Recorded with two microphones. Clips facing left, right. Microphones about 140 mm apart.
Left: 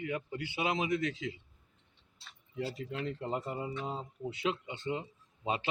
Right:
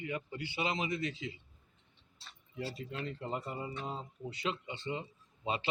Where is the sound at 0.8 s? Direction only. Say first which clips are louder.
Left 4 dB; 90° left.